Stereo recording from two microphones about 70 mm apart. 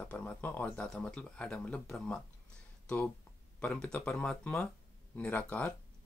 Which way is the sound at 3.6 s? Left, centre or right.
Centre.